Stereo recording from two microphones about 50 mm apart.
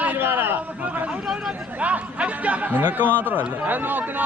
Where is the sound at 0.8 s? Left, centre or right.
Right.